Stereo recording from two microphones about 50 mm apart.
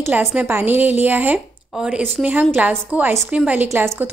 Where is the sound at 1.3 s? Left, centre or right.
Centre.